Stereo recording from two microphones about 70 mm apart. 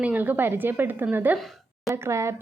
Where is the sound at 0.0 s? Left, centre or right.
Right.